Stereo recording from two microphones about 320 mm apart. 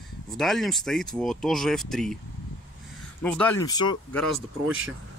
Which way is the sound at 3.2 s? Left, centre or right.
Centre.